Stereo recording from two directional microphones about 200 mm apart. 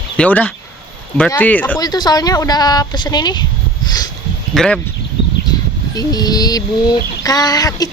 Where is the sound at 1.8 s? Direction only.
20° left (ahead or behind).